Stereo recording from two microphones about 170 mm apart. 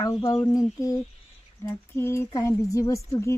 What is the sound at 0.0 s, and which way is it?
Speech, 20° left (ahead or behind).